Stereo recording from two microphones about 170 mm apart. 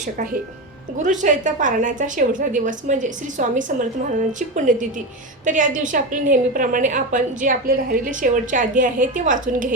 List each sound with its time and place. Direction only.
0.9 s a woman's voice: 45° right (ahead or behind)